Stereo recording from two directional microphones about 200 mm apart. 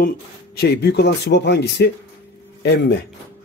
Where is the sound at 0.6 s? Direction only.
55° left (ahead or behind).